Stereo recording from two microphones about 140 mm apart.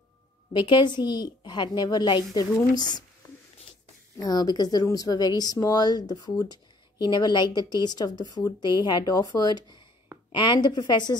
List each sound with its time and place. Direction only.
0.5 s a woman's voice: 35° left (ahead or behind)
4.2 s a woman's voice: 30° left (ahead or behind)